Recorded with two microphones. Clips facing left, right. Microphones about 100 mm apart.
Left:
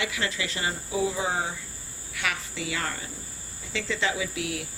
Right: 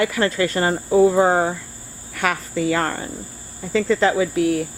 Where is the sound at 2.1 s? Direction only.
45° right (ahead or behind).